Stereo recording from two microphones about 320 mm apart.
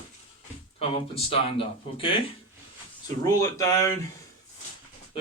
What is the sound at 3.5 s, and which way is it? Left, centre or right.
Speech, centre.